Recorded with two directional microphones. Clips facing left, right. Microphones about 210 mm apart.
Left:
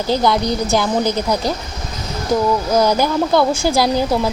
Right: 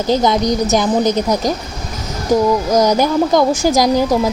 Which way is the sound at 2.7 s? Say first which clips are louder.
Right 2 dB; 20° right (ahead or behind).